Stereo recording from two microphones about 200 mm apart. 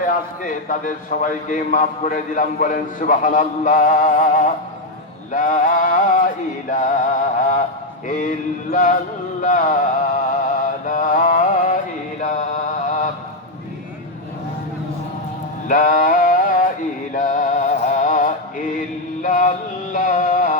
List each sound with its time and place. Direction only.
0.4 s a man's voice: 40° left (ahead or behind)
10.4 s mantra: 40° left (ahead or behind)
15.6 s a sound: 40° left (ahead or behind)
17.2 s music: 40° left (ahead or behind)
19.2 s mantra: 40° left (ahead or behind)